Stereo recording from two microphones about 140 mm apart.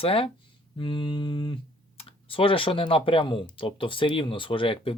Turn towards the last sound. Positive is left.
turn(degrees=40)  # may be behind; listen again after turning